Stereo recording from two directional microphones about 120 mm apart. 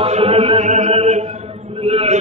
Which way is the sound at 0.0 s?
55° right (ahead or behind).